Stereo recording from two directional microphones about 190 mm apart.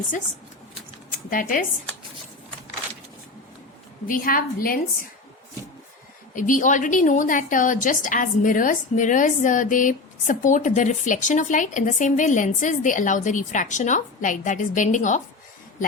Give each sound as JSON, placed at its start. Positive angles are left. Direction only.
{"t": 1.3, "sound": "a woman's voice", "side_deg": 45}
{"t": 4.0, "sound": "a woman's voice", "side_deg": 50}
{"t": 6.3, "sound": "a woman's voice", "side_deg": 45}